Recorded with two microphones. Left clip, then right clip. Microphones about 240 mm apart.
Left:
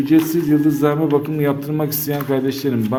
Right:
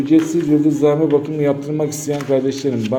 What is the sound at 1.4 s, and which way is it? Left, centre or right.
Speech, left.